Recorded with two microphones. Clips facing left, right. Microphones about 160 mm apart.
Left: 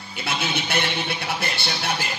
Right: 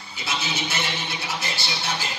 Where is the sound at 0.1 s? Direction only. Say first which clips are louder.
Left 3 dB; 60° left (ahead or behind).